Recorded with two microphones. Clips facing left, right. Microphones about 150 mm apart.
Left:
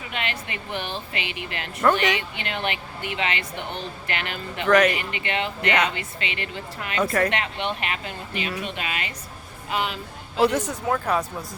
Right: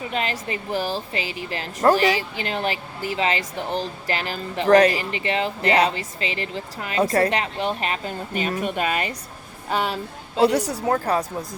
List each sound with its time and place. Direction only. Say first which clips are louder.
0.1 s a woman's voice: right 3 dB; 35° right (ahead or behind)